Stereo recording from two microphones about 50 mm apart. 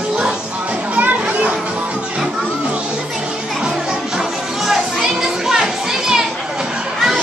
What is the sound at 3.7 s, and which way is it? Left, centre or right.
Children playing, centre.